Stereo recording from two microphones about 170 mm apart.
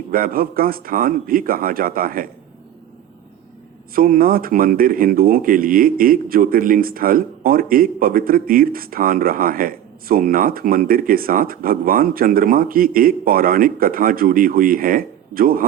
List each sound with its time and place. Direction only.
0.1 s speech: 55° right (ahead or behind)
3.9 s speech: 55° right (ahead or behind)